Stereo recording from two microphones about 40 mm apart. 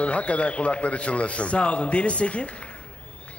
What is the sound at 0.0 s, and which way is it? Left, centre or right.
Speech, left.